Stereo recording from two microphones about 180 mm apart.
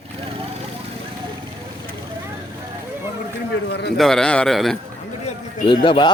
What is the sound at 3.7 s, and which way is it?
Speech, 70° left (ahead or behind).